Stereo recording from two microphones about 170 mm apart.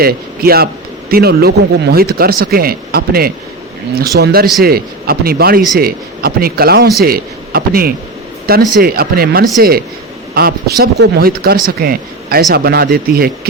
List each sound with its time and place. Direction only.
0.0 s speech: 65° right (ahead or behind)